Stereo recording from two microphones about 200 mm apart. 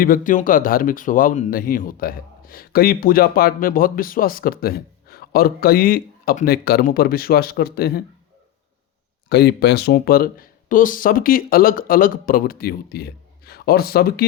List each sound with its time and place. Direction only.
0.0 s speech: 45° left (ahead or behind)
9.3 s speech: 55° left (ahead or behind)